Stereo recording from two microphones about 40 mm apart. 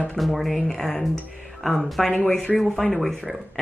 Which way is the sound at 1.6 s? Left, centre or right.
Centre.